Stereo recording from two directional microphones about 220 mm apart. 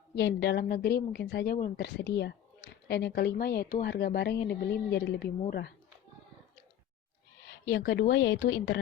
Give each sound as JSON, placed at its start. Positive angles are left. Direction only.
{"t": 0.2, "sound": "a woman's voice", "side_deg": 50}
{"t": 7.7, "sound": "a woman's voice", "side_deg": 50}